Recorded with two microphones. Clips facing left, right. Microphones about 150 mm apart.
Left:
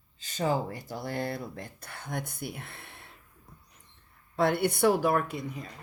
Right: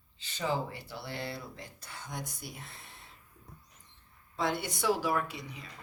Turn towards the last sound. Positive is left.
turn(degrees=50)  # may be behind; listen again after turning